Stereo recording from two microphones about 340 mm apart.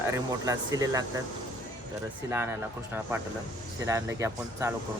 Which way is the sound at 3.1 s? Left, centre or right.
Centre.